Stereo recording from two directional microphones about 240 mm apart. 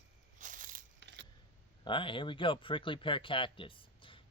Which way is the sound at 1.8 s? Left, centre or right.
Left.